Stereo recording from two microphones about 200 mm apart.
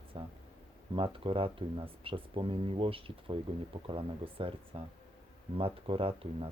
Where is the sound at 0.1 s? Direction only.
25° right (ahead or behind).